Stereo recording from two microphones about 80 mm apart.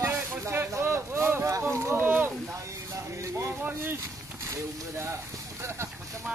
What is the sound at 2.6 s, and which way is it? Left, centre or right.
Vehicle, right.